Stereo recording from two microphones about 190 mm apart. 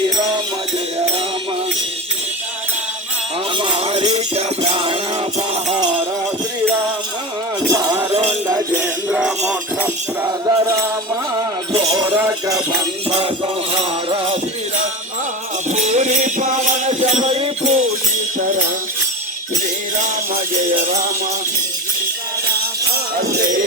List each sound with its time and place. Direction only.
0.0 s music: 25° right (ahead or behind)
3.6 s music: 30° right (ahead or behind)
7.7 s music: 15° right (ahead or behind)
8.1 s music: 30° right (ahead or behind)
8.4 s music: 10° right (ahead or behind)
13.1 s music: 30° right (ahead or behind)
15.7 s music: 35° right (ahead or behind)
18.3 s music: 45° right (ahead or behind)
20.0 s music: 40° right (ahead or behind)